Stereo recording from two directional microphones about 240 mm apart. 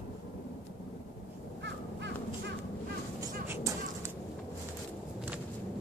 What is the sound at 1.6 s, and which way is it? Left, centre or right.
Crow, right.